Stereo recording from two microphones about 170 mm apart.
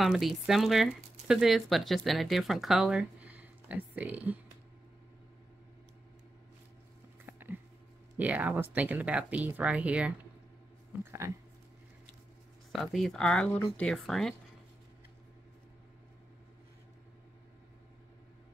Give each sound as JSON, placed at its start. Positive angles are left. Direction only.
{"t": 0.0, "sound": "speech", "side_deg": 0}
{"t": 7.2, "sound": "a sound", "side_deg": -10}
{"t": 8.2, "sound": "speech", "side_deg": -10}
{"t": 12.7, "sound": "speech", "side_deg": 0}